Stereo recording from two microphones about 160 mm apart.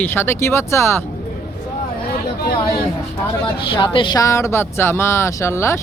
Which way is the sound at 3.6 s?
30° left (ahead or behind).